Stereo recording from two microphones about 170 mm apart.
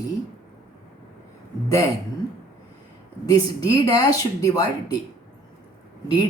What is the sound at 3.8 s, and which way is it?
Speech, 20° left (ahead or behind).